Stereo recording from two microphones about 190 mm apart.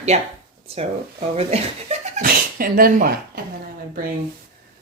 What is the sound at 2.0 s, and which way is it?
Speech, 50° right (ahead or behind).